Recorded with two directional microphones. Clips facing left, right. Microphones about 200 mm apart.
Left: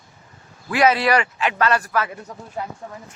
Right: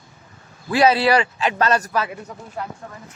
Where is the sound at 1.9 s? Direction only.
15° right (ahead or behind).